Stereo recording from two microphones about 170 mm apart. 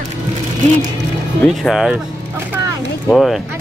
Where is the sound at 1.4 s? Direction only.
Centre (ahead or behind).